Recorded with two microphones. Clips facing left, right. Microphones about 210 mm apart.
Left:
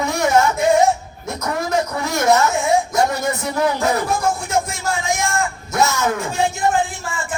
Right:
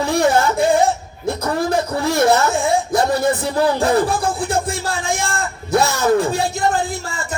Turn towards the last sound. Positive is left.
turn(degrees=-35)  # may be behind; listen again after turning